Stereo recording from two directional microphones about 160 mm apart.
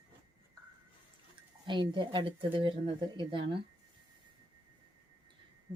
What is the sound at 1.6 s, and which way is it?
Speech, 30° right (ahead or behind).